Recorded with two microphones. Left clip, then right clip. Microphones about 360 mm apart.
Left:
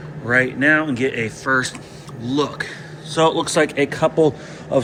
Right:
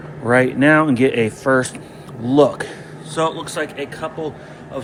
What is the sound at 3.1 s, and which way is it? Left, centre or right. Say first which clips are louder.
A man's voice: left 4 dB; centre.